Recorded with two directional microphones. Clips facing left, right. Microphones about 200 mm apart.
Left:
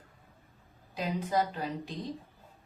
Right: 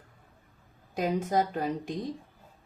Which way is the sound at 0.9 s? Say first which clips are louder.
Right 3 dB; 45° right (ahead or behind).